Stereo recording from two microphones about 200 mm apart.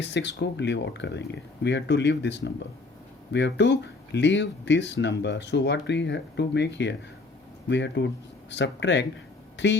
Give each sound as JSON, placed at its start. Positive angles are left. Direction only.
{"t": 0.0, "sound": "speech", "side_deg": 60}